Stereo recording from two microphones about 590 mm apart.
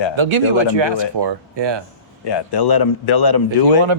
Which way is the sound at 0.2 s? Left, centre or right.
Right.